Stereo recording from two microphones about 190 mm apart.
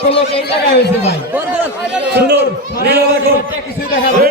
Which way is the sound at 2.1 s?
60° right (ahead or behind).